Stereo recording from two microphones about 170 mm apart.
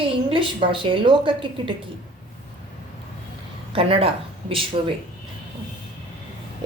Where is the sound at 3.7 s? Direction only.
35° right (ahead or behind).